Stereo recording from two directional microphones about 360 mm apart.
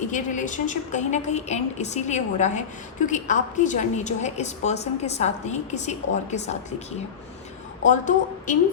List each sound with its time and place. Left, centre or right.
0.1 s a woman's voice: left
7.9 s a woman's voice: left